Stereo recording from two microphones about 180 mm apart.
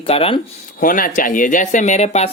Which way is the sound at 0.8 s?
50° left (ahead or behind).